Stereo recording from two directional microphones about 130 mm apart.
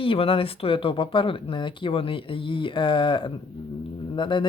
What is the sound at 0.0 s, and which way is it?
Speech, 45° left (ahead or behind).